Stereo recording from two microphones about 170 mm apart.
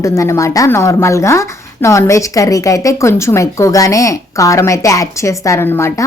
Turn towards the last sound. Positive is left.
turn(degrees=15)  # may be behind; listen again after turning